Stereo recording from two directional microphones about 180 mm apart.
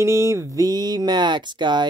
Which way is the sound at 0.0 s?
15° right (ahead or behind).